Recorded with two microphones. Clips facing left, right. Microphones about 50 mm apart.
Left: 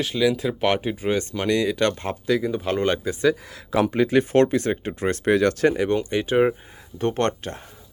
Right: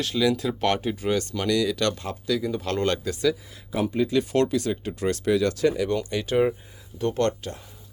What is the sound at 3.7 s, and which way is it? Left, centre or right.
Speech, left.